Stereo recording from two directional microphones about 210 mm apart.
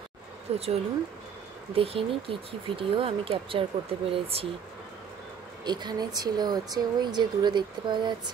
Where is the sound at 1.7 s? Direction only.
25° right (ahead or behind).